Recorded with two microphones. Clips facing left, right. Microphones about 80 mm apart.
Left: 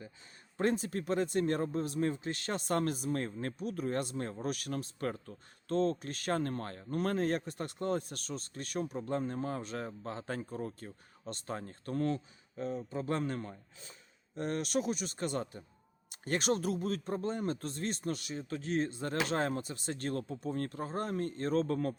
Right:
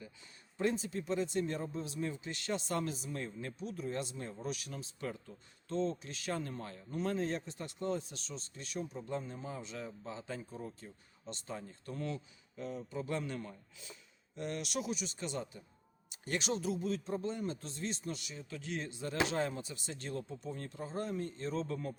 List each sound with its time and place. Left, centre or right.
0.5 s speech: left